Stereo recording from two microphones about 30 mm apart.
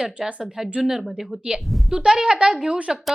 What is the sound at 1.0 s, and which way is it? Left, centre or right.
Speech, centre.